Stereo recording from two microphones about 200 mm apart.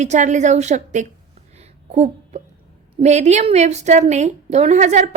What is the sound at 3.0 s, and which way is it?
A woman's voice, 35° right (ahead or behind).